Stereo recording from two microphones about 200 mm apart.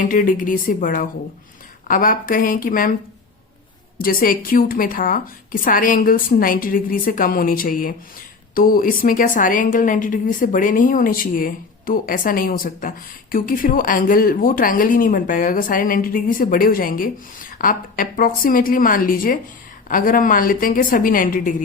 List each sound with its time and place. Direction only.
0.1 s a woman's voice: 40° left (ahead or behind)
3.9 s a woman's voice: 45° left (ahead or behind)